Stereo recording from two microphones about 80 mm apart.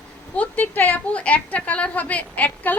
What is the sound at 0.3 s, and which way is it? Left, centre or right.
A woman's voice, left.